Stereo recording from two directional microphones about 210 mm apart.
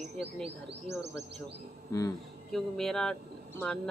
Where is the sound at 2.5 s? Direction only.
Centre (ahead or behind).